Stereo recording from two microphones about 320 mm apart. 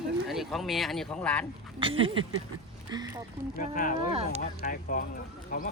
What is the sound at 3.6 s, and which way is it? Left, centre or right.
Speech, left.